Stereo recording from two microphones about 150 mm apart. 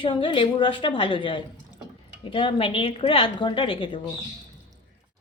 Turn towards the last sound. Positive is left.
turn(degrees=35)  # may be behind; listen again after turning